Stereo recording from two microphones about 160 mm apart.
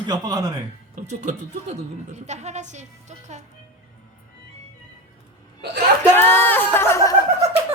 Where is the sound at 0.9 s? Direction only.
50° right (ahead or behind).